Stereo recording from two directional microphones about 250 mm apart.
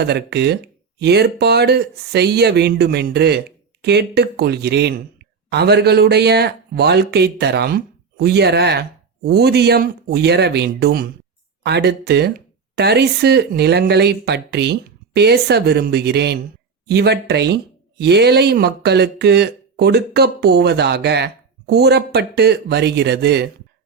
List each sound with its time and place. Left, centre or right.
0.0 s speech: right